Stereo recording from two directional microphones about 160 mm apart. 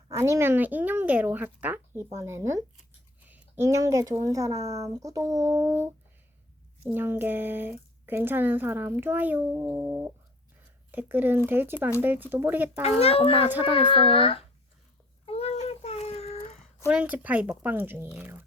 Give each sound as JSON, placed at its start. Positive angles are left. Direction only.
{"t": 0.1, "sound": "a woman's voice", "side_deg": -15}
{"t": 9.5, "sound": "speech", "side_deg": -25}
{"t": 10.9, "sound": "speech", "side_deg": -10}
{"t": 12.8, "sound": "a child's voice", "side_deg": 40}
{"t": 13.5, "sound": "speech", "side_deg": -10}
{"t": 13.7, "sound": "a child's voice", "side_deg": 30}
{"t": 15.3, "sound": "child singing", "side_deg": 40}
{"t": 16.8, "sound": "speech", "side_deg": -10}